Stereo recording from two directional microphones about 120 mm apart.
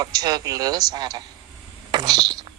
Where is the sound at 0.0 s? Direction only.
35° right (ahead or behind).